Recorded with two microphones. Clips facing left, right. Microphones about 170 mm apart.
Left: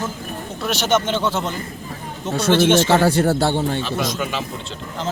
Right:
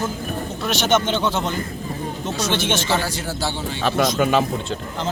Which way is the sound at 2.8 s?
60° left (ahead or behind).